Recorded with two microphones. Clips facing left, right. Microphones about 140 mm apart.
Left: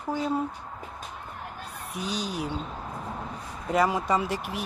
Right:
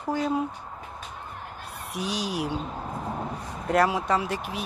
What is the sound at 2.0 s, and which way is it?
Speech, 90° right.